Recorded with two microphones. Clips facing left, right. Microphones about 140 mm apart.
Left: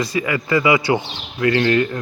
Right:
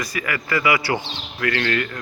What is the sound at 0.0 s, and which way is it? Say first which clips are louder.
Speech: left 6 dB; 25° left (ahead or behind).